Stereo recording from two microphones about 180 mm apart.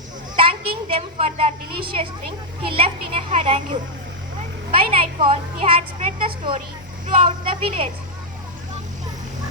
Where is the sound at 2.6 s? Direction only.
30° right (ahead or behind).